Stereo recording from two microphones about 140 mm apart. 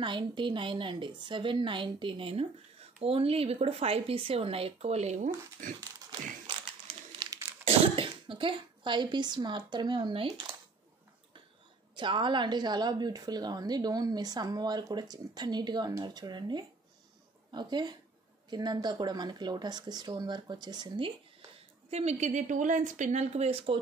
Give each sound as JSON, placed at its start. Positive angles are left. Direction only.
{"t": 0.0, "sound": "a woman's voice", "side_deg": -35}
{"t": 7.2, "sound": "crumpling", "side_deg": -25}
{"t": 7.6, "sound": "speech", "side_deg": -40}
{"t": 11.9, "sound": "a woman's voice", "side_deg": -35}
{"t": 21.9, "sound": "speech", "side_deg": -55}